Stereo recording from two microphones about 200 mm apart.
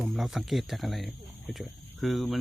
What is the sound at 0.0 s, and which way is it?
Speech, centre (ahead or behind).